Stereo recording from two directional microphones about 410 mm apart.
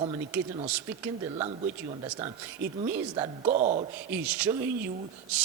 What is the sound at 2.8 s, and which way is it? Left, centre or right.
A man's voice, centre.